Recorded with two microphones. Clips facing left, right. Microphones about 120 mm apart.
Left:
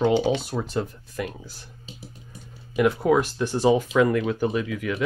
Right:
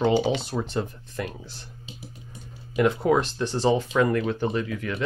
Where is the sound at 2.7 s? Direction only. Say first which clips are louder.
Left 1 dB; 5° left (ahead or behind).